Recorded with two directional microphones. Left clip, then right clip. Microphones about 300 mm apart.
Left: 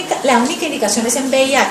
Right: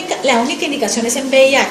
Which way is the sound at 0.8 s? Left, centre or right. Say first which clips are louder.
Left 1 dB; right.